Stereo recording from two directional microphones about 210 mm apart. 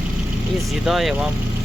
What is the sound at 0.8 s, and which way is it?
Speech, centre (ahead or behind).